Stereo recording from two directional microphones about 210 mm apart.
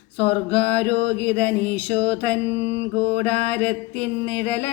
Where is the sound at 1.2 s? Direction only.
5° left (ahead or behind).